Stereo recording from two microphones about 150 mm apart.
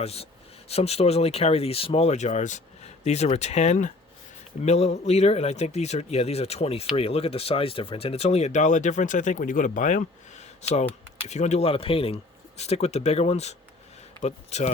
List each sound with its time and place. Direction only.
0.0 s speech: 45° left (ahead or behind)